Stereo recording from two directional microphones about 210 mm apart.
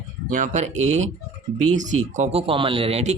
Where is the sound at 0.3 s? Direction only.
40° right (ahead or behind).